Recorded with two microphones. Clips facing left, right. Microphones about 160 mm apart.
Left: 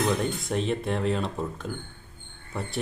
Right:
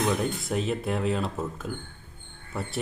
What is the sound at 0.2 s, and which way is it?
Speech, centre (ahead or behind).